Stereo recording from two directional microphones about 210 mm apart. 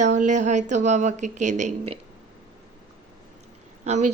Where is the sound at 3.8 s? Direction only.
35° right (ahead or behind).